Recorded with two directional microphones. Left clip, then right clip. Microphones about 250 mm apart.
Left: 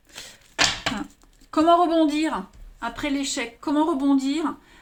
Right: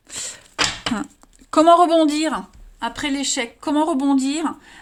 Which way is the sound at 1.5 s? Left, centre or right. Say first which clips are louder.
Right 5 dB; right.